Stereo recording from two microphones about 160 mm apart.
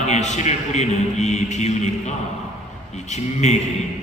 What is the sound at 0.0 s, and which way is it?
A man's voice, 45° left (ahead or behind).